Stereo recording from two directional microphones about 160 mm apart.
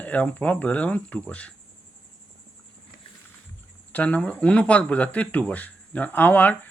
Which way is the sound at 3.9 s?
10° left (ahead or behind).